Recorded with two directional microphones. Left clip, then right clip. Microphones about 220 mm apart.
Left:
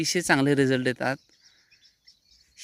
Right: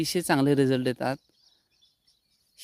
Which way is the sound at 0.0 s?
10° right (ahead or behind).